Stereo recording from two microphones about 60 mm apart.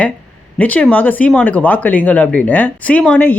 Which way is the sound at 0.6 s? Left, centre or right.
Left.